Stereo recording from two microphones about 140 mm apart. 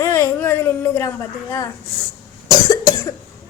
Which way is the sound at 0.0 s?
20° left (ahead or behind).